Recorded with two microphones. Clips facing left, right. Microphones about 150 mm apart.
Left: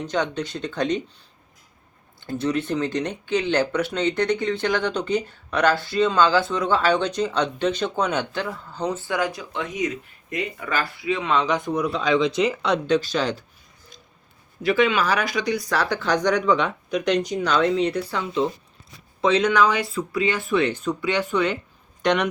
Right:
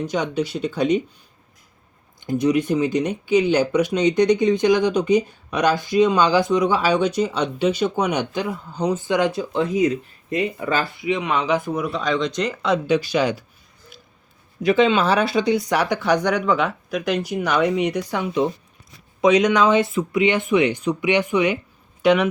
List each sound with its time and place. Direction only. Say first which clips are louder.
0.0 s speech: right 2 dB; 10° right (ahead or behind)
2.2 s speech: right 5 dB; 15° right (ahead or behind)
14.6 s speech: right 3 dB; 20° right (ahead or behind); by 22.3 s 5° right (ahead or behind)